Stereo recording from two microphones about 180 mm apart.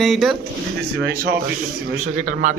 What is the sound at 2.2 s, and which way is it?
Speech, 45° right (ahead or behind).